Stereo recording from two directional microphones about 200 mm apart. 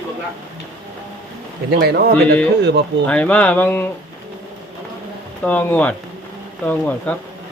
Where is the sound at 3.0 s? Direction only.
5° left (ahead or behind).